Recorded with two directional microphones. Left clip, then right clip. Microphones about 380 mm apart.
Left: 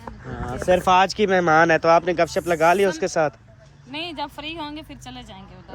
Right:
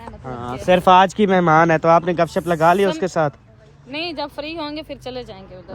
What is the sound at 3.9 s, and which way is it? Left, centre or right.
Speech, centre.